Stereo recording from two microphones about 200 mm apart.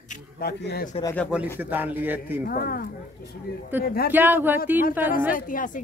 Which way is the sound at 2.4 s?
50° left (ahead or behind).